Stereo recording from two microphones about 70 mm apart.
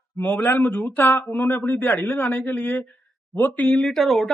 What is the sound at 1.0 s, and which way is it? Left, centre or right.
Speech, left.